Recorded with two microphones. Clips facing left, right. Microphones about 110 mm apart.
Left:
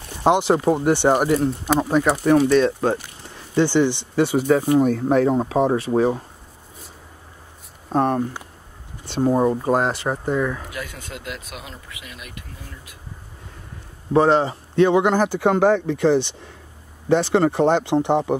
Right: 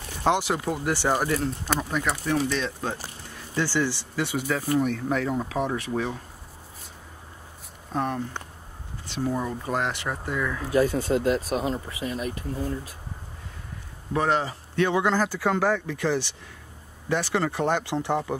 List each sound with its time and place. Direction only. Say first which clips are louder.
0.2 s speech: left 7 dB; 25° left (ahead or behind)
1.8 s speech: left 11 dB; 35° left (ahead or behind)
2.4 s speech: left 11 dB; 50° left (ahead or behind)
3.5 s speech: left 8 dB; 20° left (ahead or behind)
7.9 s speech: left 8 dB; 45° left (ahead or behind); by 10.6 s 30° left (ahead or behind)
10.7 s speech: right 12 dB; 35° right (ahead or behind)
14.1 s speech: left 8 dB; 30° left (ahead or behind)